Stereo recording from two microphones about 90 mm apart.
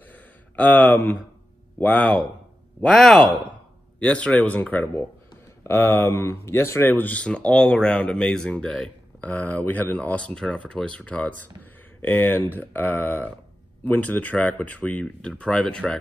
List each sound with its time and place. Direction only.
0.1 s a sound: 15° left (ahead or behind)
1.8 s speech: 20° left (ahead or behind)
2.8 s speech: 5° left (ahead or behind)